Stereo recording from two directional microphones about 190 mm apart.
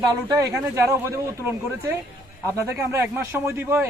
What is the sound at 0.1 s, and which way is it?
Speech, 20° right (ahead or behind).